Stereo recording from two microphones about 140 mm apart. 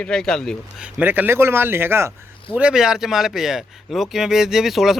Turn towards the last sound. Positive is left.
turn(degrees=-5)  # may be behind; listen again after turning